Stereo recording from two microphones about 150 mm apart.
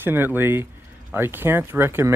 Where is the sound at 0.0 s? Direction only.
15° right (ahead or behind).